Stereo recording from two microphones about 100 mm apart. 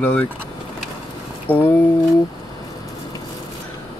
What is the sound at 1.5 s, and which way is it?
Speech, 15° left (ahead or behind).